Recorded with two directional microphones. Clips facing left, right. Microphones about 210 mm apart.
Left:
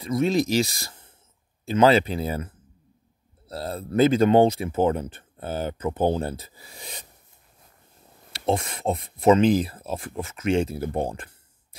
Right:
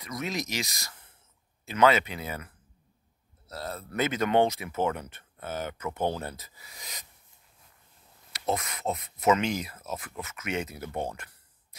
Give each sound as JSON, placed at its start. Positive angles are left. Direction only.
{"t": 0.0, "sound": "speech", "side_deg": 30}
{"t": 8.3, "sound": "speech", "side_deg": 30}